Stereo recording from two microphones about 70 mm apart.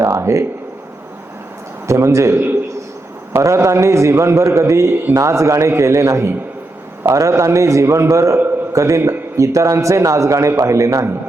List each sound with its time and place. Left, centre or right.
0.0 s a sound: right
1.9 s a man's voice: right
2.3 s a man's voice: right
3.3 s a man's voice: right